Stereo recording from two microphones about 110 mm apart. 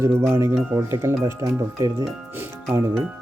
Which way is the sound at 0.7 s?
35° right (ahead or behind).